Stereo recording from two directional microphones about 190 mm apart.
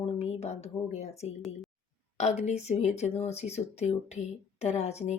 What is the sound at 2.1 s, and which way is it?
Speech, 35° left (ahead or behind).